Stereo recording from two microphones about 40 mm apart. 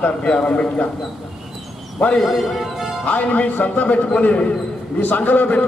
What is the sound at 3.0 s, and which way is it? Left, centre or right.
A man's voice, left.